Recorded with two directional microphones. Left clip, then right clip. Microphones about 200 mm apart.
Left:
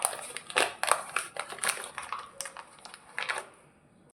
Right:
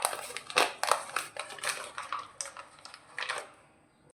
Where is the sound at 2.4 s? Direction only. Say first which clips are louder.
Left 1 dB; 35° left (ahead or behind).